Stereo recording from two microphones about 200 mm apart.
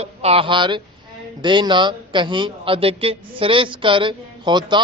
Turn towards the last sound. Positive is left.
turn(degrees=-20)  # may be behind; listen again after turning